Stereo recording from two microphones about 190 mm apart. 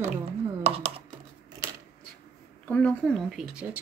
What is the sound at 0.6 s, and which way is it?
Speech, 30° right (ahead or behind).